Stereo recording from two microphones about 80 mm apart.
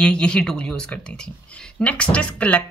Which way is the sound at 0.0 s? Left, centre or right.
Centre.